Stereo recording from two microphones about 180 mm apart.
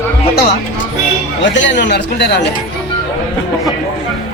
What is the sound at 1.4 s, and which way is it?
Speech, 85° left.